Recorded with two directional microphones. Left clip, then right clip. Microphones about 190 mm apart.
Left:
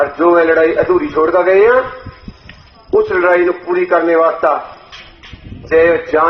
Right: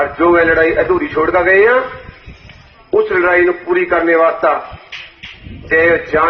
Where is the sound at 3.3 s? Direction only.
50° left (ahead or behind).